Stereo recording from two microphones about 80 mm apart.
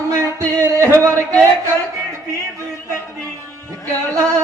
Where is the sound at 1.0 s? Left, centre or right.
Right.